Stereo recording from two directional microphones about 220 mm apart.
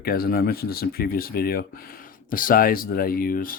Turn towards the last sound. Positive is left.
turn(degrees=40)  # may be behind; listen again after turning